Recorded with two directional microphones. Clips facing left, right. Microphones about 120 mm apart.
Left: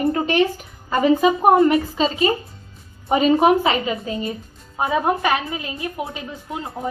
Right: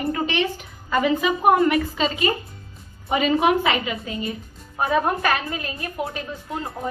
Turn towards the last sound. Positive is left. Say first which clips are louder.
# left 1 dB
turn(degrees=15)  # may be behind; listen again after turning